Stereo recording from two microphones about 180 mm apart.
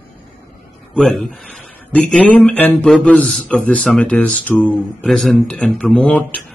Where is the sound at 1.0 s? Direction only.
Centre (ahead or behind).